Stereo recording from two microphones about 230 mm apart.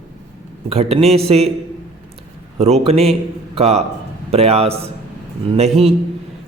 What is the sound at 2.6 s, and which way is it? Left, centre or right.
A man's voice, right.